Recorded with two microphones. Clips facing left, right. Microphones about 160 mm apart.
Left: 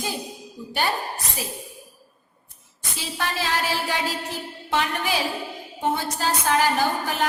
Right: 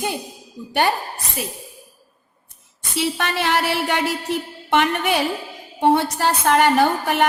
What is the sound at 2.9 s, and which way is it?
A woman's voice, 70° right (ahead or behind).